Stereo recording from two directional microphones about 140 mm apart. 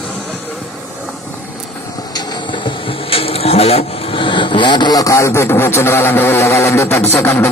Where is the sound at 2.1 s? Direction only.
30° left (ahead or behind).